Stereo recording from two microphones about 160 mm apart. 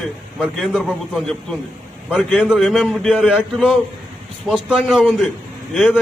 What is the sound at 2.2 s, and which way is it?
A man's voice, 5° left (ahead or behind).